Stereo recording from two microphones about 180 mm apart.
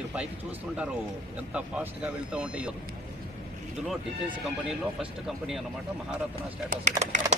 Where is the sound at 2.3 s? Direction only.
5° right (ahead or behind).